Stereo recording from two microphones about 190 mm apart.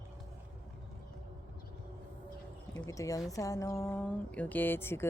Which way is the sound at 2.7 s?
15° left (ahead or behind).